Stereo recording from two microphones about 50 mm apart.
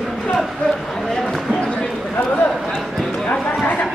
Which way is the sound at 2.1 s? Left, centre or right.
Left.